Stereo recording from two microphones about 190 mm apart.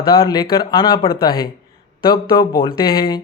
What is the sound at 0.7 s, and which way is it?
Speech, 25° left (ahead or behind).